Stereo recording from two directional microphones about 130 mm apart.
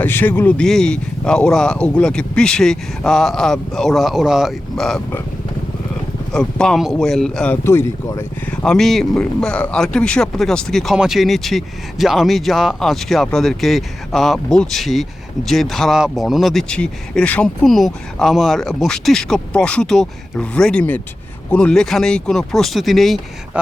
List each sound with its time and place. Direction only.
0.0 s speech: 15° left (ahead or behind)
6.3 s speech: 5° left (ahead or behind)
7.5 s speech: 20° left (ahead or behind)
8.4 s speech: 10° left (ahead or behind)